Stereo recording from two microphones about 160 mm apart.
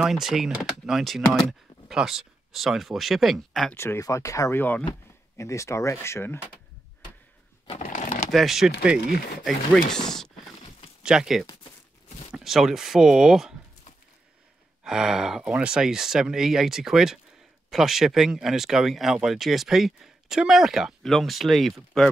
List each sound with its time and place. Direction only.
0.0 s speech: 5° right (ahead or behind)
3.7 s speech: 15° left (ahead or behind)
7.8 s typewriter: 50° left (ahead or behind)
8.3 s speech: centre (ahead or behind)
14.8 s speech: 5° right (ahead or behind)